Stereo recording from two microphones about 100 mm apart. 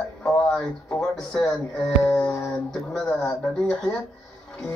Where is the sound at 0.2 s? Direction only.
5° left (ahead or behind).